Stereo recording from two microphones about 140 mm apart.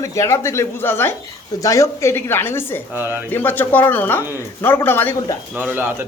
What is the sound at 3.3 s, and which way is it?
Speech, 15° left (ahead or behind).